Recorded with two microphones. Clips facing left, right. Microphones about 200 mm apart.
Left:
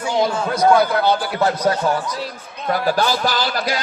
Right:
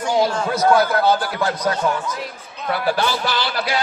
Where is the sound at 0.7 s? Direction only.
5° right (ahead or behind).